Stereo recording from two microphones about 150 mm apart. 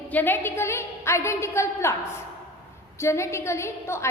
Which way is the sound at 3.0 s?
20° left (ahead or behind).